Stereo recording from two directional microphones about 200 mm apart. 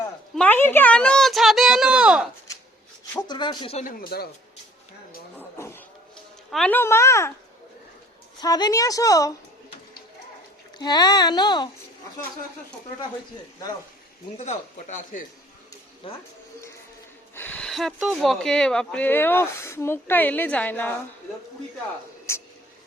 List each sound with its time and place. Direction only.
0.3 s a woman's voice: 10° left (ahead or behind)
3.1 s speech: 20° left (ahead or behind)
3.8 s speech: 50° left (ahead or behind)
5.5 s a sound: 10° left (ahead or behind)
6.5 s speech: 5° left (ahead or behind)
8.4 s speech: 20° left (ahead or behind)
10.8 s speech: 20° left (ahead or behind)
14.3 s speech: 35° left (ahead or behind)
16.0 s speech: 25° left (ahead or behind)
17.3 s speech: 10° left (ahead or behind)
22.3 s a sound: 15° left (ahead or behind)